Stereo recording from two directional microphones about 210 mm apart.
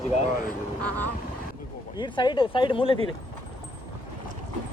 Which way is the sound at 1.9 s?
20° left (ahead or behind).